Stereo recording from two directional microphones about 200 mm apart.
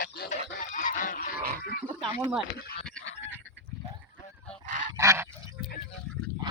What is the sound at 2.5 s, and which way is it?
Speech, 50° left (ahead or behind).